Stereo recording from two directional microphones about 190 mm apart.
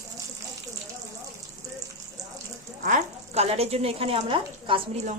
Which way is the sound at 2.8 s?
35° right (ahead or behind).